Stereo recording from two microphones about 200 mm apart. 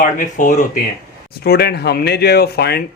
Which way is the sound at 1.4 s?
50° left (ahead or behind).